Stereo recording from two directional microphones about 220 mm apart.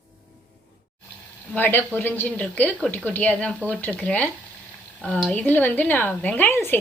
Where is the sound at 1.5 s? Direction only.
10° left (ahead or behind).